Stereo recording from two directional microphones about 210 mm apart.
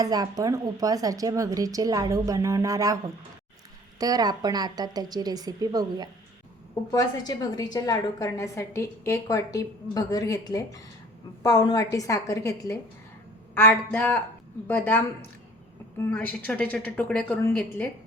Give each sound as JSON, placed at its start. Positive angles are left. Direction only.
{"t": 0.0, "sound": "a woman's voice", "side_deg": -15}
{"t": 6.9, "sound": "a woman's voice", "side_deg": 20}